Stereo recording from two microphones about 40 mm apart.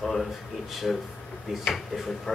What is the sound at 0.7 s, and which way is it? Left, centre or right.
Speech, centre.